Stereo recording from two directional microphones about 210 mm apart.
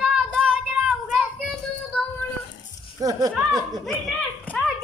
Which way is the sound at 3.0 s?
15° right (ahead or behind).